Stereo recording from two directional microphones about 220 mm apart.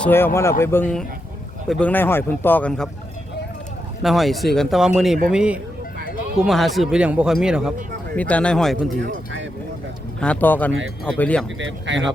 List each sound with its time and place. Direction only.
0.0 s a man's voice: 10° left (ahead or behind)
4.0 s speech: centre (ahead or behind)
10.2 s a man's voice: 5° left (ahead or behind)
11.6 s speech: 55° right (ahead or behind)